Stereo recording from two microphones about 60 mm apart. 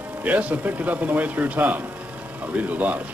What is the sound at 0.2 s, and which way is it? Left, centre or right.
Speech, right.